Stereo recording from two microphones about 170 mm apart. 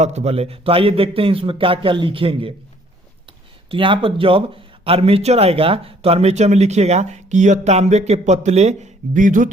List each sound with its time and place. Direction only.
0.0 s speech: 40° right (ahead or behind)
3.7 s speech: 30° right (ahead or behind); by 9.5 s 50° right (ahead or behind)